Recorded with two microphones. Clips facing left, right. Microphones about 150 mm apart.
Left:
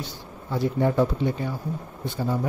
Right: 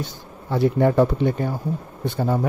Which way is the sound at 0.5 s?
65° right (ahead or behind).